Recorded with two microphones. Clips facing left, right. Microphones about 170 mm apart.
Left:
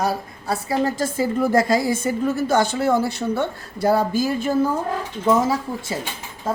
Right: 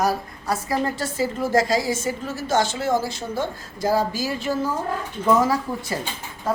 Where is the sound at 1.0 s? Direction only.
55° left (ahead or behind).